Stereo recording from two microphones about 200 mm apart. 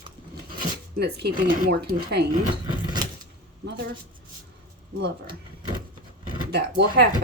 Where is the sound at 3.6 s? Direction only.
60° right (ahead or behind).